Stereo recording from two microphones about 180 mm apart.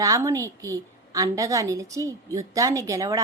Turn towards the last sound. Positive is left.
turn(degrees=-20)  # may be behind; listen again after turning